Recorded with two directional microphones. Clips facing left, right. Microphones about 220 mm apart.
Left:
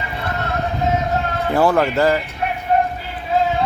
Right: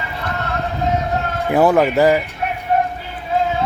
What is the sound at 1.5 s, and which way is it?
Speech, 15° right (ahead or behind).